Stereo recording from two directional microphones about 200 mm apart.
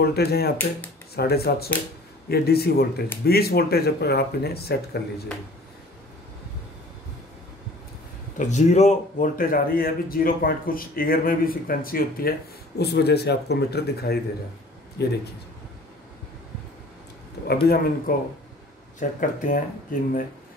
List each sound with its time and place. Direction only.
0.0 s a man's voice: 50° left (ahead or behind)
8.4 s a man's voice: 35° left (ahead or behind); by 15.1 s 55° left (ahead or behind)
17.5 s a man's voice: 50° left (ahead or behind)